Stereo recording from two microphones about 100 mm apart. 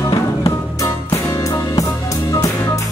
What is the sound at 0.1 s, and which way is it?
Music, 40° left (ahead or behind).